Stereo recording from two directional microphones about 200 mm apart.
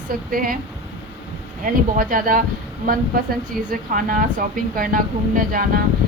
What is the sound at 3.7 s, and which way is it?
A woman's voice, 45° right (ahead or behind).